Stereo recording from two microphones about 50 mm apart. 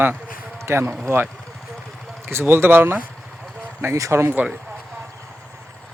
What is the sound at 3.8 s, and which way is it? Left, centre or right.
Speech, right.